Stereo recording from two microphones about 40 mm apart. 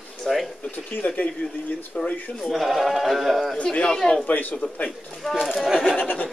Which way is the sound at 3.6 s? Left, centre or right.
Left.